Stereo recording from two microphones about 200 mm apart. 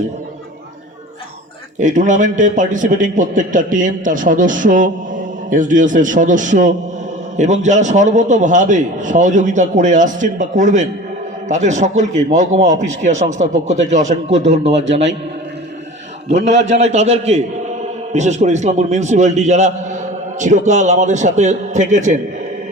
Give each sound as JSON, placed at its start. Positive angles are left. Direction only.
{"t": 1.8, "sound": "a man's voice", "side_deg": -40}
{"t": 16.6, "sound": "a man's voice", "side_deg": -35}